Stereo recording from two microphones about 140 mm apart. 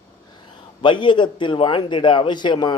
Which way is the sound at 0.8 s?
35° left (ahead or behind).